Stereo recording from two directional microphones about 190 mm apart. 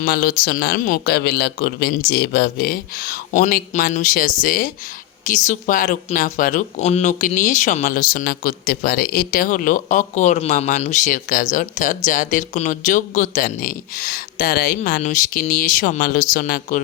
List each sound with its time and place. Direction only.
0.0 s speech: 55° left (ahead or behind)